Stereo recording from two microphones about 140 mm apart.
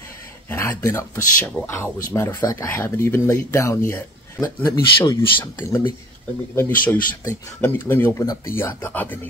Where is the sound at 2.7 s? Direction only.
15° left (ahead or behind).